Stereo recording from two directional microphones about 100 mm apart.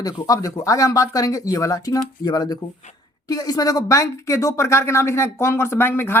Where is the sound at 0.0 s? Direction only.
35° left (ahead or behind).